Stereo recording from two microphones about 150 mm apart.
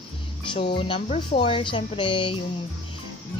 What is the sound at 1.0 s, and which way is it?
Speech, 45° left (ahead or behind).